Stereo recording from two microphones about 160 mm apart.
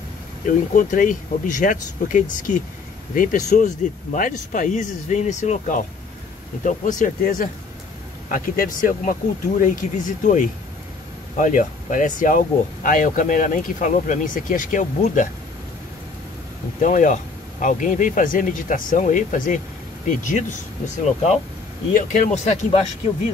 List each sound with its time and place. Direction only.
0.5 s speech: 55° left (ahead or behind)
16.8 s speech: 50° left (ahead or behind)
21.9 s speech: 55° left (ahead or behind)